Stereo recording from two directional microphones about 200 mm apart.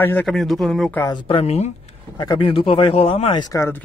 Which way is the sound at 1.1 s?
25° left (ahead or behind).